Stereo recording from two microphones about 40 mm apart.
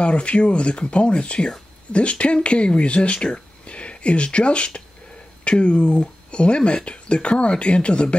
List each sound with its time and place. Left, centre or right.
0.0 s speech: left